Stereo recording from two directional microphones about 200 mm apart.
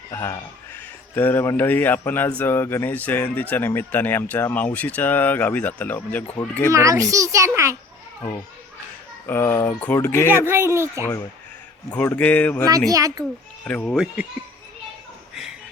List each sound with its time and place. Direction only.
0.1 s speech: 15° left (ahead or behind)
6.7 s a child's voice: 15° right (ahead or behind)
9.2 s speech: 10° left (ahead or behind)
10.4 s a child's voice: 10° right (ahead or behind)
11.9 s speech: 10° left (ahead or behind)
12.9 s a child's voice: 15° right (ahead or behind)
13.7 s speech: 5° left (ahead or behind)